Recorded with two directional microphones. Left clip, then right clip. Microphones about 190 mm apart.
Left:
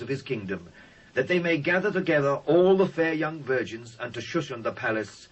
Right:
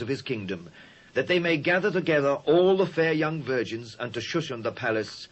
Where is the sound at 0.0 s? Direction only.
30° right (ahead or behind).